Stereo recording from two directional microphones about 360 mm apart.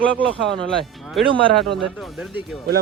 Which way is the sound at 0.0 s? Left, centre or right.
Centre.